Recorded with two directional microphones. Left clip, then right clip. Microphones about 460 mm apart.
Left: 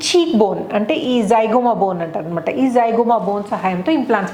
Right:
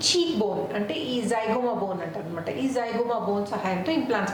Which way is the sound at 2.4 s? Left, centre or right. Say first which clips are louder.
Left 13 dB; left.